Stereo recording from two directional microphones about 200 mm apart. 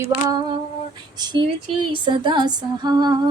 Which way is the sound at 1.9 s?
25° right (ahead or behind).